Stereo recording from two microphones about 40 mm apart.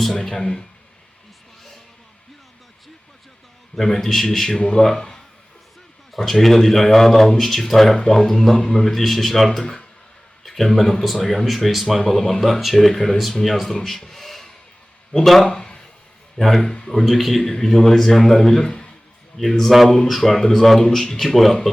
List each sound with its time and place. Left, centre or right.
0.3 s a man's voice: left
4.0 s a man's voice: centre
6.1 s a man's voice: centre; by 8.9 s left
8.9 s speech: centre
12.0 s a man's voice: centre
12.4 s speech: centre
14.0 s a sound: centre
15.2 s speech: centre
15.4 s a sound: left
16.6 s a man's voice: left
16.9 s speech: centre
17.4 s a man's voice: centre
20.3 s a man's voice: centre
21.2 s speech: centre